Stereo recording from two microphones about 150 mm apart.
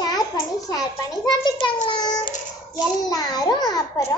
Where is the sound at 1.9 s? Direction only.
30° left (ahead or behind).